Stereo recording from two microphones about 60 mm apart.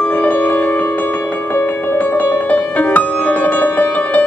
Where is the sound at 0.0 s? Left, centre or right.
Left.